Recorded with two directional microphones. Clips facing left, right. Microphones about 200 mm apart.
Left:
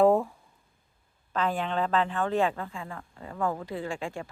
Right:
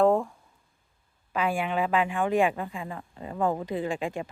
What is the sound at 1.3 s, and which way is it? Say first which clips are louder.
A woman's voice: right 1 dB; 10° right (ahead or behind).